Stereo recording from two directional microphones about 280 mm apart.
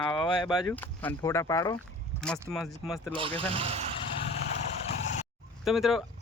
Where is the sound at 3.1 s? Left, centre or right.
Centre.